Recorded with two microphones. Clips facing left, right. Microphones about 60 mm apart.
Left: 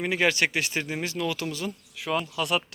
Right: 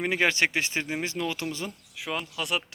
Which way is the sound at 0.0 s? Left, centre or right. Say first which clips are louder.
Even; right.